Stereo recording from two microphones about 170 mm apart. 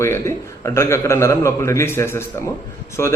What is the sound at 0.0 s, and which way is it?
A man's voice, 15° left (ahead or behind).